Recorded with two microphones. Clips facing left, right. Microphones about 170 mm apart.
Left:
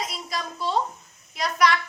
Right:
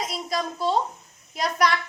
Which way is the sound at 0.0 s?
45° right (ahead or behind).